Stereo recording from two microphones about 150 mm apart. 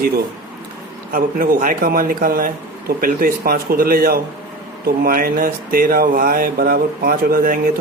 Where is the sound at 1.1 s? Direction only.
70° right (ahead or behind).